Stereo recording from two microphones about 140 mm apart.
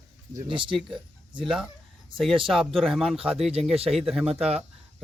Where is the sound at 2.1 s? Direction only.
Centre (ahead or behind).